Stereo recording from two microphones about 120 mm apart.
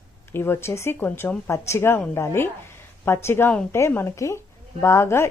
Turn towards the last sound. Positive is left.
turn(degrees=20)  # may be behind; listen again after turning